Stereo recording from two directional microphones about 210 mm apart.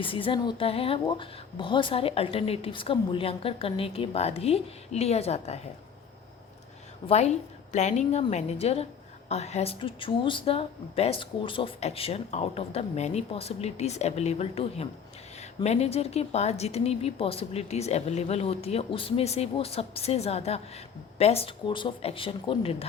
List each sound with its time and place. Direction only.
0.0 s a woman's voice: 25° left (ahead or behind)
7.1 s a woman's voice: 30° left (ahead or behind)